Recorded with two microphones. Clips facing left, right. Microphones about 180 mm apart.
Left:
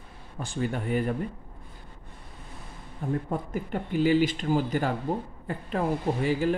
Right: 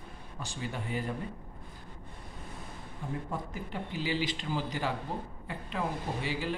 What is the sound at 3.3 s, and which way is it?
Speech, 50° left (ahead or behind).